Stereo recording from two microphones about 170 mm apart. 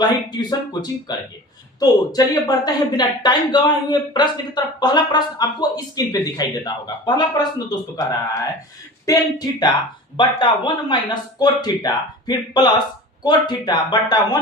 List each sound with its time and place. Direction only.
0.0 s speech: 25° left (ahead or behind)